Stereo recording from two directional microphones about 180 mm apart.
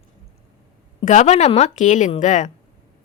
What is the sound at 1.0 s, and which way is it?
A woman's voice, 40° left (ahead or behind).